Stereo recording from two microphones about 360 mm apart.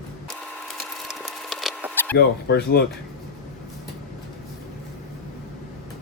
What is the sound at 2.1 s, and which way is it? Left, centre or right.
Speech, left.